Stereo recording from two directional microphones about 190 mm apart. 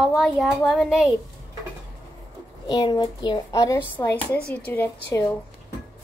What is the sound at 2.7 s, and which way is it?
Speech, 20° left (ahead or behind).